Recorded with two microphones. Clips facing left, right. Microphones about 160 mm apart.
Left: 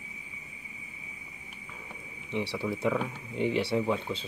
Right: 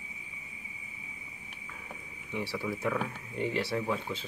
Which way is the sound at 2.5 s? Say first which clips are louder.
Left 3 dB; 20° left (ahead or behind).